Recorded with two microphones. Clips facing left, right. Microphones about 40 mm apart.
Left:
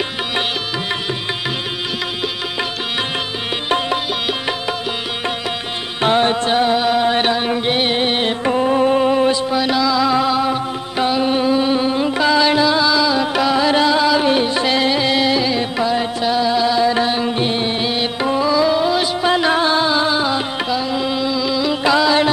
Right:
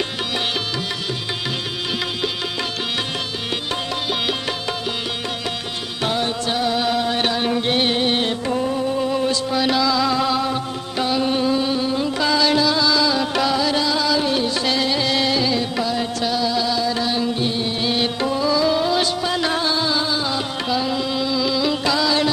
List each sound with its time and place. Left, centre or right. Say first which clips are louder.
4.3 s music: left 3 dB; centre
5.9 s music: left 8 dB; left
8.5 s music: left 6 dB; left
9.1 s music: left 5 dB; left
9.5 s music: left 2 dB; centre
13.6 s music: left 5 dB; left
17.8 s music: left 2 dB; centre
19.2 s music: left 6 dB; left
20.6 s music: left 2 dB; centre
21.8 s music: left 8 dB; left